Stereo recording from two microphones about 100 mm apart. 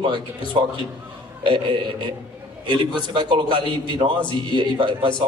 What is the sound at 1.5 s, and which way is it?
A man's voice, 50° right (ahead or behind).